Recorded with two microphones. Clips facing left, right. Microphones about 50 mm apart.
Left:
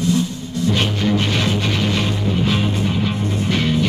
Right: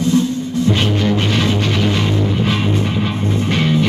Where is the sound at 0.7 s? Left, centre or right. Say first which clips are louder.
Right 2 dB; centre.